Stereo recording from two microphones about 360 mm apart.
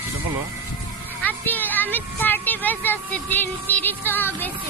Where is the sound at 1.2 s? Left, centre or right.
Centre.